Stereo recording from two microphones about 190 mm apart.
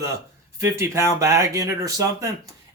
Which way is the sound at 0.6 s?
15° right (ahead or behind).